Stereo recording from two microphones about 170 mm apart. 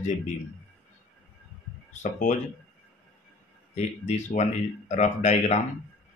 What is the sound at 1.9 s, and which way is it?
Speech, 45° left (ahead or behind).